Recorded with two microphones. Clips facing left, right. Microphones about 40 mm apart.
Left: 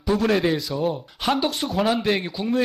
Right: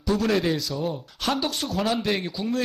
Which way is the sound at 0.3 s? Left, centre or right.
Centre.